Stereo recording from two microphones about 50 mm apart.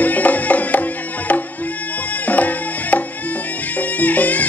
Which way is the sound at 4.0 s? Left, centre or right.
Left.